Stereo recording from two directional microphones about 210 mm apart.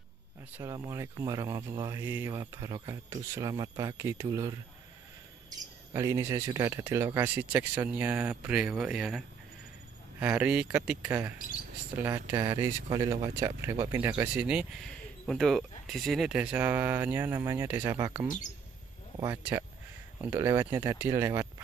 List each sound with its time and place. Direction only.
0.6 s speech: 15° right (ahead or behind)
5.9 s speech: 15° right (ahead or behind)
10.2 s speech: 5° right (ahead or behind)